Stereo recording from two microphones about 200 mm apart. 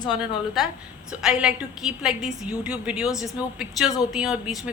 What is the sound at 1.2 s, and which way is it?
A woman's voice, 5° right (ahead or behind).